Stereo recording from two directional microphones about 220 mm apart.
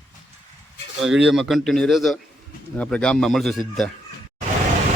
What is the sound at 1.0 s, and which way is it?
Speech, centre (ahead or behind).